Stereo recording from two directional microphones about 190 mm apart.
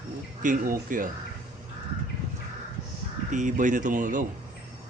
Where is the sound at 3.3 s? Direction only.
40° right (ahead or behind).